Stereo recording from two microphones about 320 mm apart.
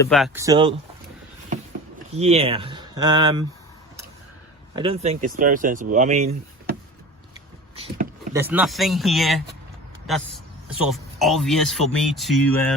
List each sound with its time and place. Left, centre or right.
0.0 s speech: centre
0.3 s speech: centre
2.1 s speech: centre
4.8 s speech: centre
8.3 s speech: centre